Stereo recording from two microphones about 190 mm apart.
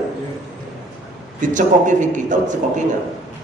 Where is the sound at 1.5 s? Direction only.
40° right (ahead or behind).